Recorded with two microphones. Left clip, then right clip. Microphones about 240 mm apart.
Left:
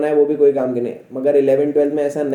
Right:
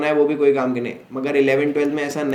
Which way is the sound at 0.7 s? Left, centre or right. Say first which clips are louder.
Left 3 dB; right.